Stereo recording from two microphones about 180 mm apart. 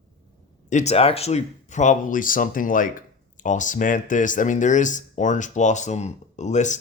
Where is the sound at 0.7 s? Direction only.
40° left (ahead or behind).